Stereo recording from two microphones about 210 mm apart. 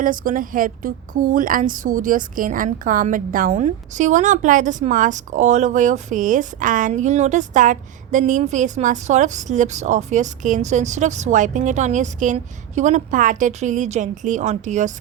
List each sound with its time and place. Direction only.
0.0 s a woman's voice: 40° right (ahead or behind)